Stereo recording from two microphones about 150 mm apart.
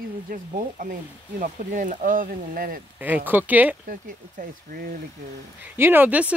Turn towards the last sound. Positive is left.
turn(degrees=-10)  # may be behind; listen again after turning